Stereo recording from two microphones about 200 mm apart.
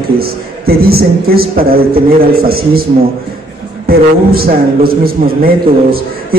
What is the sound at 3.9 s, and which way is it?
A man's voice, 50° right (ahead or behind).